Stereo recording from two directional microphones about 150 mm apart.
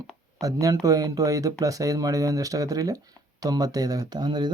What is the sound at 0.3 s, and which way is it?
Speech, 25° right (ahead or behind).